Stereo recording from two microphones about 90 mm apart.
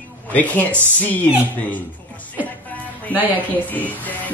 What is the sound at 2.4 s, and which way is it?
Music, 20° left (ahead or behind).